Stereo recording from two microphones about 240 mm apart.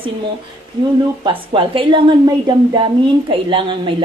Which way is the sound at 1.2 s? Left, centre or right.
Right.